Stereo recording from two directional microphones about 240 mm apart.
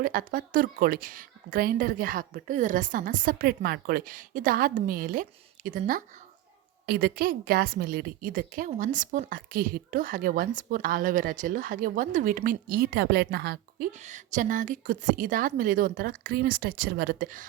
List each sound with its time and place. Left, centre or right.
0.0 s a woman's voice: right